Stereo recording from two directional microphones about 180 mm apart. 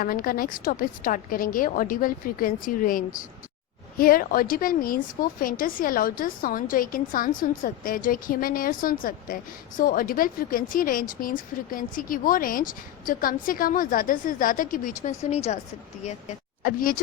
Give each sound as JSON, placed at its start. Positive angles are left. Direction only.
{"t": 0.0, "sound": "speech", "side_deg": 50}
{"t": 16.6, "sound": "speech", "side_deg": 50}